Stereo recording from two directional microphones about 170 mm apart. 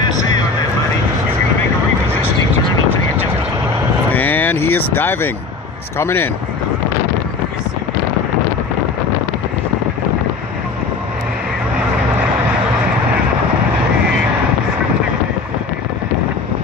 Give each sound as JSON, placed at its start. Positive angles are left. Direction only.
{"t": 4.1, "sound": "vehicle", "side_deg": 10}
{"t": 5.9, "sound": "speech", "side_deg": 15}